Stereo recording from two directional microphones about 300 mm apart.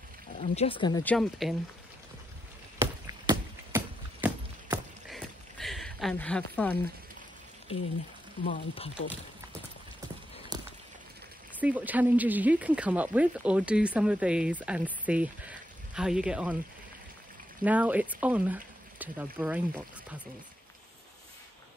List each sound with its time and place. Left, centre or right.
0.4 s speech: centre
1.1 s speech: centre
2.8 s a sound: centre
8.5 s speech: centre
10.5 s a sound: centre
11.6 s speech: centre
17.6 s speech: centre